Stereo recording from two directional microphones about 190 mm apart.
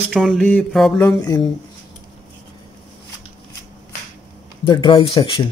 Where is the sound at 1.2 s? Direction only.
20° left (ahead or behind).